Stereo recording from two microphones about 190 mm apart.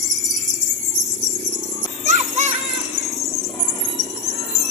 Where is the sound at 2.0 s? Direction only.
35° right (ahead or behind).